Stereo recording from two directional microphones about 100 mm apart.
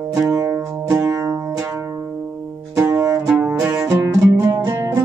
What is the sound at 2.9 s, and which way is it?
Music, 35° right (ahead or behind).